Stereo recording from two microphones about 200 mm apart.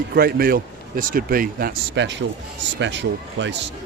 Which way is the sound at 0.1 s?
50° right (ahead or behind).